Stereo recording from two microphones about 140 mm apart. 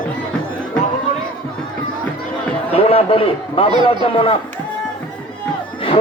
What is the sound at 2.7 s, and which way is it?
A man's voice, 40° left (ahead or behind).